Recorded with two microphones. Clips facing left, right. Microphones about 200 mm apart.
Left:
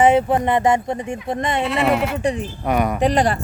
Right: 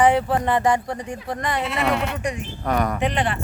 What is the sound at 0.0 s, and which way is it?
Speech, 20° left (ahead or behind).